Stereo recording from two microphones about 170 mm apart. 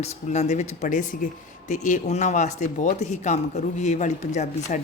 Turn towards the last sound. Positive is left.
turn(degrees=45)  # may be behind; listen again after turning